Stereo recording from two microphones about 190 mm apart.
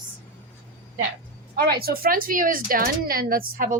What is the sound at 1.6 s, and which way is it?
Speech, 55° right (ahead or behind).